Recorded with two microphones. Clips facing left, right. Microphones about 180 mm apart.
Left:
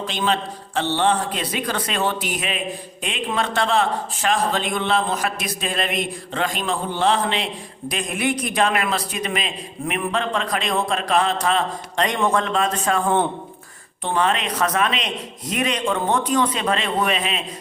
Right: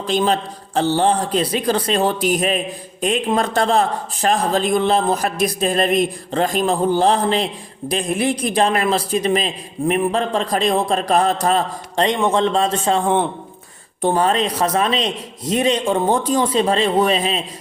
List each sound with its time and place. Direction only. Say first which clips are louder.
0.1 s a man's voice: right 7 dB; 40° right (ahead or behind)
12.0 s a man's voice: right 4 dB; 25° right (ahead or behind)
14.0 s a man's voice: right 5 dB; 40° right (ahead or behind)